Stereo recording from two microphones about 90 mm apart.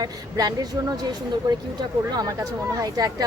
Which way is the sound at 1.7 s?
45° right (ahead or behind).